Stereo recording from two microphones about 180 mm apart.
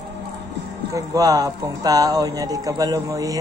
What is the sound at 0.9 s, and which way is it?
Speech, 20° right (ahead or behind).